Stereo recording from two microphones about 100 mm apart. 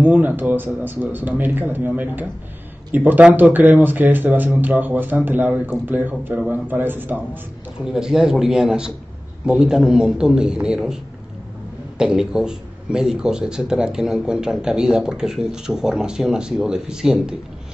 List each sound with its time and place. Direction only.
0.0 s a man's voice: 15° right (ahead or behind)
7.8 s a man's voice: 5° right (ahead or behind)
12.0 s speech: 10° right (ahead or behind)